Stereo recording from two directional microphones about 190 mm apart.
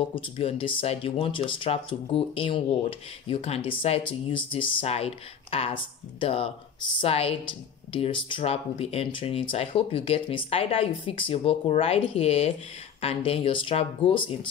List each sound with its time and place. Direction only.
0.1 s speech: 30° left (ahead or behind)